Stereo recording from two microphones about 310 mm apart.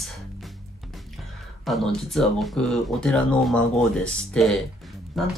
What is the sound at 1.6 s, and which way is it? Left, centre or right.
Speech, centre.